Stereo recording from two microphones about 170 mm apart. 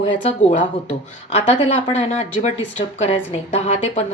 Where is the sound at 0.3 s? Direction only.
35° left (ahead or behind).